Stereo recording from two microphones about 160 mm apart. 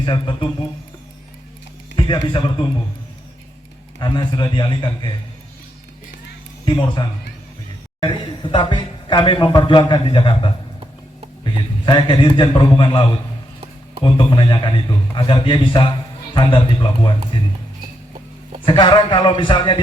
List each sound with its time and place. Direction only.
0.0 s a man's voice: 30° left (ahead or behind)
2.0 s speech: 30° left (ahead or behind)
4.0 s a man's voice: 25° left (ahead or behind)
6.7 s a man's voice: 30° left (ahead or behind)
18.6 s a man's voice: 30° left (ahead or behind)